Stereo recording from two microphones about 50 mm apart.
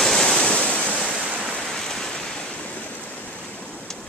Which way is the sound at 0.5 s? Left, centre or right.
Left.